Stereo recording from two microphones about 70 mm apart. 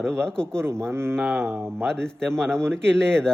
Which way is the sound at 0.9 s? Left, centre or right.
Right.